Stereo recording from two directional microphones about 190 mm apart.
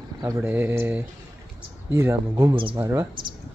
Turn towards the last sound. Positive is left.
turn(degrees=-15)  # may be behind; listen again after turning